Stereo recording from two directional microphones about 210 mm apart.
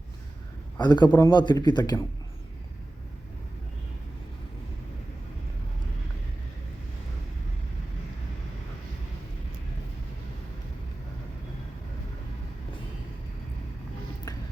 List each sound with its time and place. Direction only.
0.8 s a man's voice: 20° left (ahead or behind)